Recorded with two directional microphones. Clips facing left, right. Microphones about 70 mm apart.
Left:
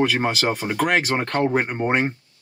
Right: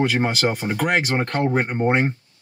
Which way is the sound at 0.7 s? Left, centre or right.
Left.